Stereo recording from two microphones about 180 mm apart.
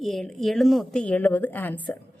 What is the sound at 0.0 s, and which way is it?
Speech, centre (ahead or behind).